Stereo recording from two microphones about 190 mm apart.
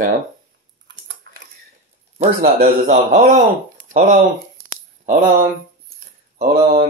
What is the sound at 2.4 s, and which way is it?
A man's voice, 45° right (ahead or behind).